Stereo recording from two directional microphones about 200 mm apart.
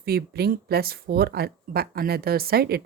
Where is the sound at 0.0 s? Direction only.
50° right (ahead or behind).